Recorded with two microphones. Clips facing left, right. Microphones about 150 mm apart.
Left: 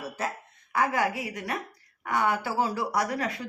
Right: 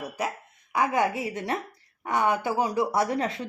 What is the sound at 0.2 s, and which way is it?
A woman's voice, 15° right (ahead or behind).